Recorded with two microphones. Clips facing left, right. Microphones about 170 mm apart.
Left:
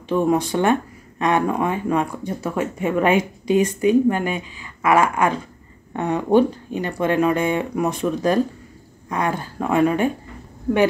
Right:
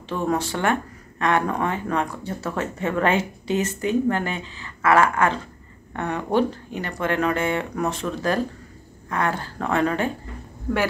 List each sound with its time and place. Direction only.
0.1 s speech: 15° left (ahead or behind)